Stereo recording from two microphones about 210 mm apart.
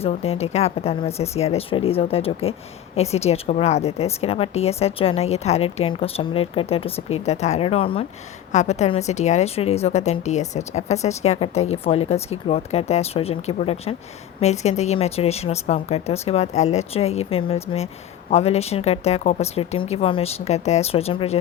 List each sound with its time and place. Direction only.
0.0 s a woman's voice: 30° left (ahead or behind)